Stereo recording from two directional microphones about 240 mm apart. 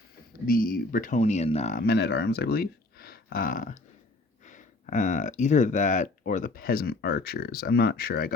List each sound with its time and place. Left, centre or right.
0.4 s speech: left